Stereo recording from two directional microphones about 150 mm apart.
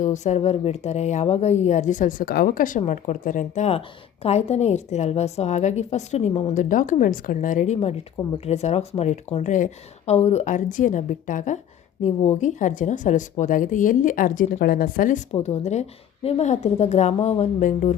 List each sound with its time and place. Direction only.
0.0 s a woman's voice: 55° left (ahead or behind)
15.3 s a woman's voice: 45° left (ahead or behind)